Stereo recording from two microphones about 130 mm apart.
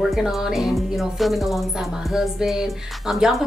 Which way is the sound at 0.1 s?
5° right (ahead or behind).